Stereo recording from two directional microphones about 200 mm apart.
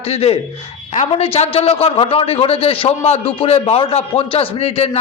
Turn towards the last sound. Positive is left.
turn(degrees=30)  # may be behind; listen again after turning